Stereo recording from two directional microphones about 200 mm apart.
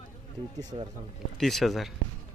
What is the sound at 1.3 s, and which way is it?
Speech, centre (ahead or behind).